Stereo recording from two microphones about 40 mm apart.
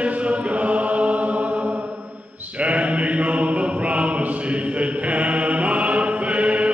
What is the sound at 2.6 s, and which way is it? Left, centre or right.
Mantra, right.